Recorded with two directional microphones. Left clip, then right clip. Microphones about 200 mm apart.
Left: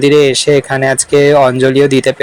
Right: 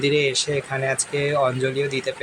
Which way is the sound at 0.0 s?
40° left (ahead or behind).